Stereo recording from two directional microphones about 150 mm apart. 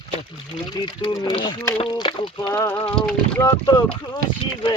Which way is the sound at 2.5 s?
15° left (ahead or behind).